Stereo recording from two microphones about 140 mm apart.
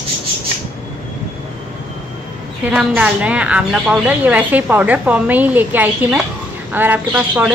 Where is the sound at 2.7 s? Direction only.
10° right (ahead or behind).